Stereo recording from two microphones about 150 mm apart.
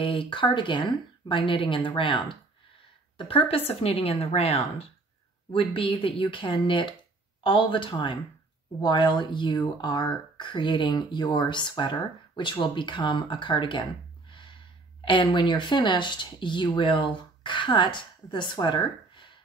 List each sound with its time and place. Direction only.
0.0 s speech: 35° left (ahead or behind)
15.0 s speech: 30° left (ahead or behind)